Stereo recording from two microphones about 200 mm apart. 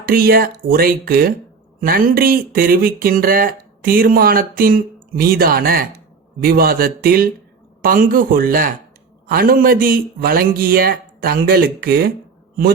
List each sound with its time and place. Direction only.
0.0 s speech: 45° right (ahead or behind)